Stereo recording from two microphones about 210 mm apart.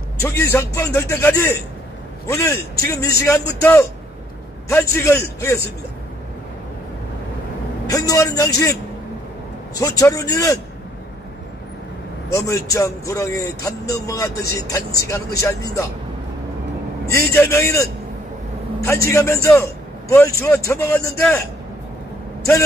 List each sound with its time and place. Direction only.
0.2 s a man's voice: 10° left (ahead or behind)
7.8 s a man's voice: 15° left (ahead or behind)
9.8 s a man's voice: 15° left (ahead or behind)
12.4 s a man's voice: 15° left (ahead or behind)
15.4 s a man's voice: 15° left (ahead or behind)
17.1 s a man's voice: 15° left (ahead or behind)